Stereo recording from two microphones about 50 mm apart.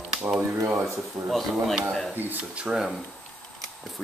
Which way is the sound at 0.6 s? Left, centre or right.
Right.